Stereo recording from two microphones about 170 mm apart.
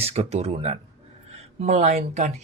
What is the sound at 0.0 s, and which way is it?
Speech, 35° right (ahead or behind).